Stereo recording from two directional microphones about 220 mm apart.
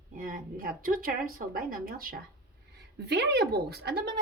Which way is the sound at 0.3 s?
40° right (ahead or behind).